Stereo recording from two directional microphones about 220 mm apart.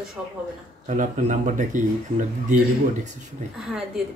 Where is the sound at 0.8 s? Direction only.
35° right (ahead or behind).